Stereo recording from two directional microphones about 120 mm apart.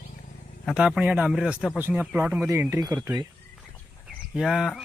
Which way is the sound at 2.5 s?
25° right (ahead or behind).